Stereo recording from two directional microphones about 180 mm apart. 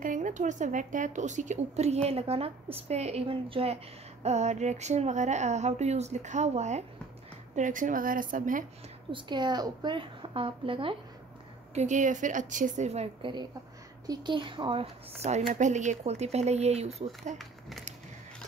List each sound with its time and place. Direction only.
0.0 s a woman's voice: 45° right (ahead or behind)
9.1 s a woman's voice: 25° right (ahead or behind)
11.7 s a woman's voice: 40° right (ahead or behind)
17.4 s speech: centre (ahead or behind)